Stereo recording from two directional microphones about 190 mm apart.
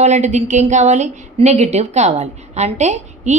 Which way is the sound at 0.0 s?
35° right (ahead or behind).